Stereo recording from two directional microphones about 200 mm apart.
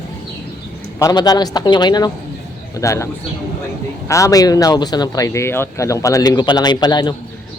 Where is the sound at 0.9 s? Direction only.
20° left (ahead or behind).